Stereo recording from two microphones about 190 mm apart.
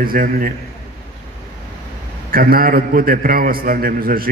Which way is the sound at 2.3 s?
50° right (ahead or behind).